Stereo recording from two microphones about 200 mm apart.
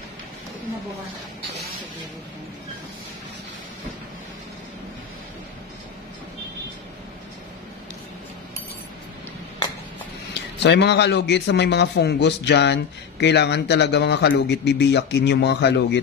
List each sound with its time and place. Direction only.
10.6 s a man's voice: 60° left (ahead or behind)